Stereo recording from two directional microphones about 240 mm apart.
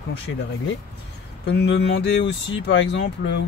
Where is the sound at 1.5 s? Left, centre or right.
Left.